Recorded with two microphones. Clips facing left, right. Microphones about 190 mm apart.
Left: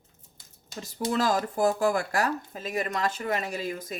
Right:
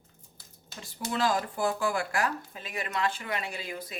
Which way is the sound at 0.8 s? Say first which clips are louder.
Left 4 dB; 40° left (ahead or behind).